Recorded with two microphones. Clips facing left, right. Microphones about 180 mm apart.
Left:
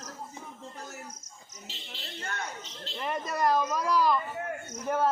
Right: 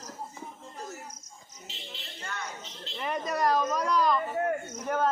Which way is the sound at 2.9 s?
Centre (ahead or behind).